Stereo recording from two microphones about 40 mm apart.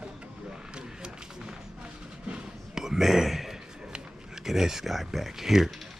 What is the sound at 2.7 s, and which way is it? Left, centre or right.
Whispering, centre.